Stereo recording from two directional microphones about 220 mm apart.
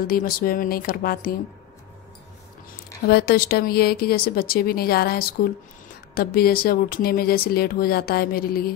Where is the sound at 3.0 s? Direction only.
45° left (ahead or behind).